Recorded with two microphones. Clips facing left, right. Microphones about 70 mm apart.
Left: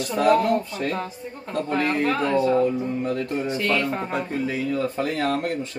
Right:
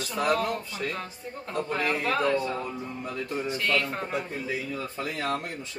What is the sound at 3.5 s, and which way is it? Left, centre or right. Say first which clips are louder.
Speech: left 3 dB; centre.